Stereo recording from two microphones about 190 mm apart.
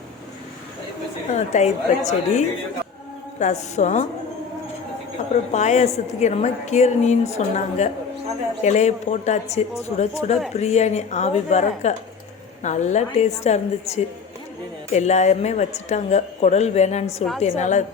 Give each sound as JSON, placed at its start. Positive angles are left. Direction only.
{"t": 1.3, "sound": "a woman's voice", "side_deg": 35}
{"t": 5.3, "sound": "a woman's voice", "side_deg": 40}